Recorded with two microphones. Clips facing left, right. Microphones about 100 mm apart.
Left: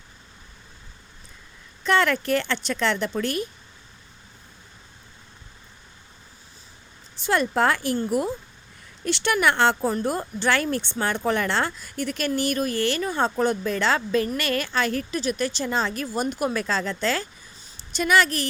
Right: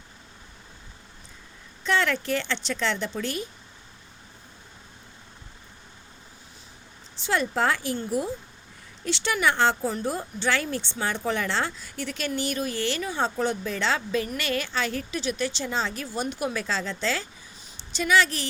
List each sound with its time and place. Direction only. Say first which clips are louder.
1.9 s speech: left 4 dB; 55° left (ahead or behind)
7.2 s a woman's voice: left 3 dB; 55° left (ahead or behind)